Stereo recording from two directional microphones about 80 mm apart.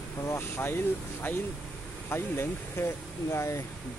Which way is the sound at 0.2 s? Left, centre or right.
Left.